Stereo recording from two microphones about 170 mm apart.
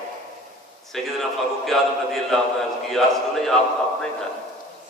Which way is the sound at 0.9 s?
Centre (ahead or behind).